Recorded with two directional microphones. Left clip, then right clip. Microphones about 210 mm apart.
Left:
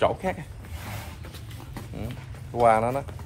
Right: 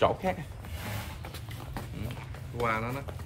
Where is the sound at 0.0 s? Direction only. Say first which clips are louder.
Left 2 dB; 15° right (ahead or behind).